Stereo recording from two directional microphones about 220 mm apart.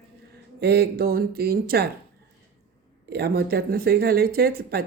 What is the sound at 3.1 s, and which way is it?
A woman's voice, 45° right (ahead or behind).